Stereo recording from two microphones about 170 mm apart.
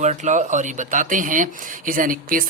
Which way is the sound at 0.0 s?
45° right (ahead or behind).